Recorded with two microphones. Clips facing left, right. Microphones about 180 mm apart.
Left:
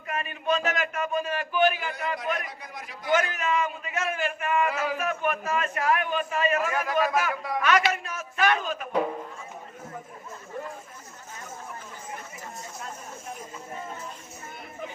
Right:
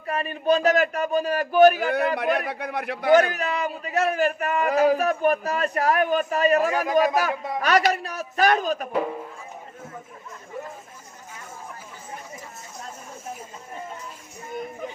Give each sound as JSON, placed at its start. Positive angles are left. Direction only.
{"t": 0.1, "sound": "a man's voice", "side_deg": -35}
{"t": 2.1, "sound": "a man's voice", "side_deg": -65}
{"t": 3.1, "sound": "a man's voice", "side_deg": -35}